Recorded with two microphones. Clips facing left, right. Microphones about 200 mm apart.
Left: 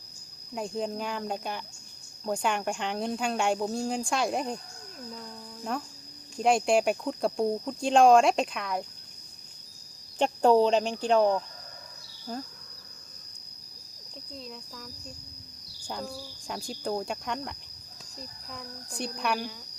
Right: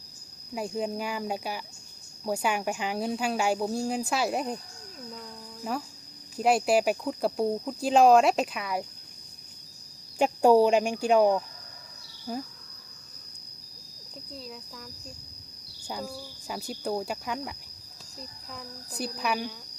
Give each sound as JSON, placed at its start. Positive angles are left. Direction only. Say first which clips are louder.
{"t": 0.5, "sound": "speech", "louder": "right 1 dB", "side_deg": -5}
{"t": 5.6, "sound": "speech", "louder": "right 1 dB", "side_deg": -5}
{"t": 10.2, "sound": "speech", "louder": "right 2 dB", "side_deg": -10}
{"t": 14.3, "sound": "speech", "louder": "even", "side_deg": -5}
{"t": 15.9, "sound": "speech", "louder": "even", "side_deg": -5}